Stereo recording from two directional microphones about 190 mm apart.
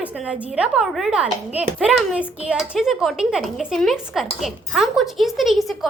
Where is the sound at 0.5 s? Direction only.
5° right (ahead or behind).